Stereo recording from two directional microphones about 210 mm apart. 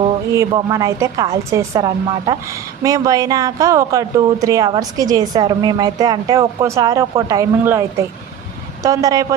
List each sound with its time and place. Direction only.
0.3 s speech: 15° right (ahead or behind)